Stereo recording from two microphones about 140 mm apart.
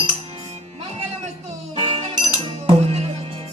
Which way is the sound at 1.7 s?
45° right (ahead or behind).